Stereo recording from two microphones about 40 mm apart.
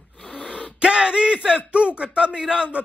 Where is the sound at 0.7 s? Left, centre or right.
Right.